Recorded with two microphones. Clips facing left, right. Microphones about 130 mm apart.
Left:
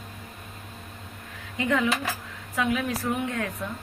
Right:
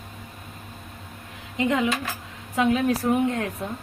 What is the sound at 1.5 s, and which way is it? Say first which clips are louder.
A woman's voice: right 2 dB; 20° right (ahead or behind).